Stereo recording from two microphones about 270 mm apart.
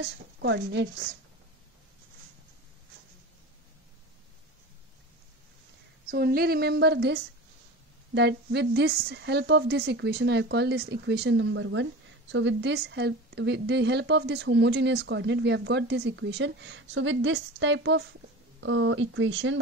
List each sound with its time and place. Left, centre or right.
0.0 s a woman's voice: right
6.0 s a woman's voice: right